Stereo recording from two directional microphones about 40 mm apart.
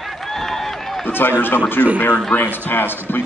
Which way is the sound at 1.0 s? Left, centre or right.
Left.